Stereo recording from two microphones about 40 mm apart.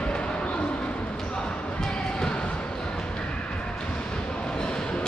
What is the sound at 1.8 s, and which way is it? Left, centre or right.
Basketball bounce, left.